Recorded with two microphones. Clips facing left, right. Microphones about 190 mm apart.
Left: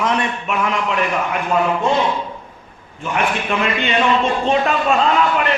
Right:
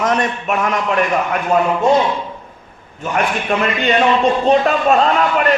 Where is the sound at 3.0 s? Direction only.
40° right (ahead or behind).